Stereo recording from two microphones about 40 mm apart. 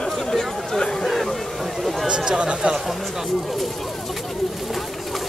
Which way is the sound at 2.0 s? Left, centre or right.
Right.